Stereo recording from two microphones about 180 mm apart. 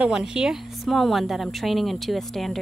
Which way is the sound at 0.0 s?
5° right (ahead or behind).